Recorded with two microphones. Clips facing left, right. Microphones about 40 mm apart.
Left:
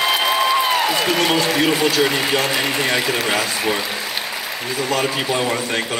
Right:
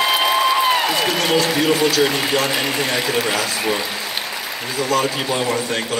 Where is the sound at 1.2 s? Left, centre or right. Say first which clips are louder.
Right 2 dB; centre.